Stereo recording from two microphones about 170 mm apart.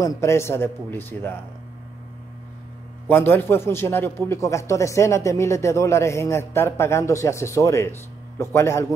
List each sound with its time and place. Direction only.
0.0 s a man's voice: 20° left (ahead or behind)
3.1 s a man's voice: 15° left (ahead or behind)